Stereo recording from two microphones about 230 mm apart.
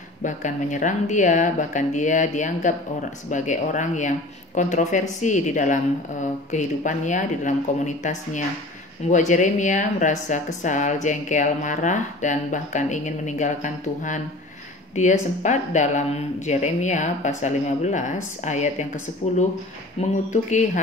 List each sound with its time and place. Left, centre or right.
0.2 s speech: left